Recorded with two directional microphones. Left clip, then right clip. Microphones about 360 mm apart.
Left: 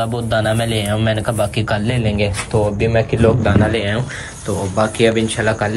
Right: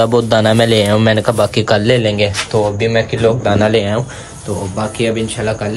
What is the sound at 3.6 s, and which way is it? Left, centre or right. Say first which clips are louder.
Speech: right 5 dB; right.